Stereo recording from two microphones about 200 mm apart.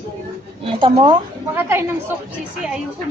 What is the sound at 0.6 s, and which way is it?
Speech, 25° right (ahead or behind).